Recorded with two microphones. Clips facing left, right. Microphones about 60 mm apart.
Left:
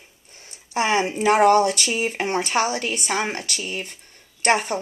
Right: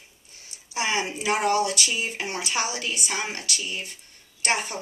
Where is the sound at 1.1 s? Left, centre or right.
Left.